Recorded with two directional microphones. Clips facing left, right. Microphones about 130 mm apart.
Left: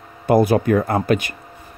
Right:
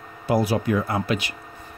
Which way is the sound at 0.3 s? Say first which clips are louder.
Left 6 dB; 50° left (ahead or behind).